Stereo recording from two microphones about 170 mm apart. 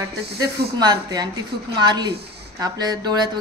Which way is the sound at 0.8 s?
25° right (ahead or behind).